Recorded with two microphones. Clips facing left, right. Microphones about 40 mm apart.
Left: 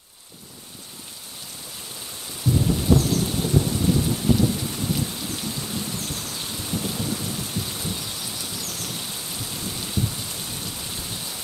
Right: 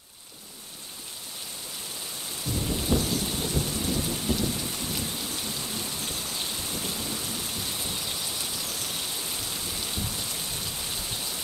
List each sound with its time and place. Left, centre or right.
2.5 s rain: centre
3.0 s thunder: centre
3.5 s a sound: centre
5.9 s rain: centre